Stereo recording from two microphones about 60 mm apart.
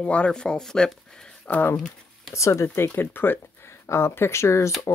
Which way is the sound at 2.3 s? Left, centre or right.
Left.